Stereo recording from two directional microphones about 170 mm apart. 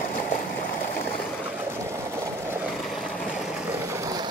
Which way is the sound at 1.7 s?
15° right (ahead or behind).